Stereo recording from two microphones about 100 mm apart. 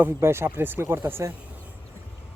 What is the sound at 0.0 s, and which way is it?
Speech, 25° right (ahead or behind).